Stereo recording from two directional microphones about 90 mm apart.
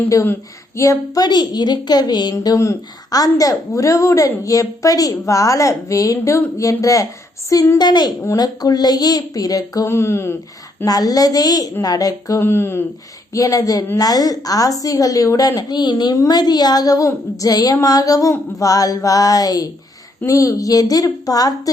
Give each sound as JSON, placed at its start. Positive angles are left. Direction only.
{"t": 0.8, "sound": "a child's voice", "side_deg": 40}
{"t": 7.8, "sound": "a child's voice", "side_deg": 50}
{"t": 9.9, "sound": "speech", "side_deg": 30}
{"t": 10.8, "sound": "a child's voice", "side_deg": 45}
{"t": 12.4, "sound": "speech", "side_deg": 25}
{"t": 13.3, "sound": "a woman's voice", "side_deg": 40}